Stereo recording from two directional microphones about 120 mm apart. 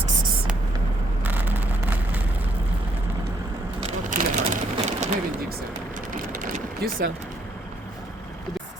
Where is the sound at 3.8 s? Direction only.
90° right; by 5.0 s 70° right (ahead or behind).